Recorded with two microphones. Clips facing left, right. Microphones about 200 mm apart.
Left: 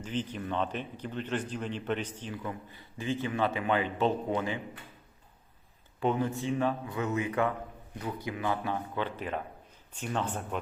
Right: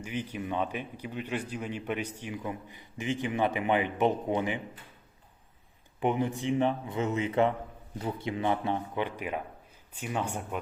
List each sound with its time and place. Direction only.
0.0 s speech: 10° right (ahead or behind)
6.0 s speech: 15° right (ahead or behind)